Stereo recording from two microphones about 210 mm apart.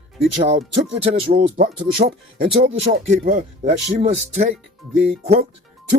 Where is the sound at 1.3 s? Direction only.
45° right (ahead or behind).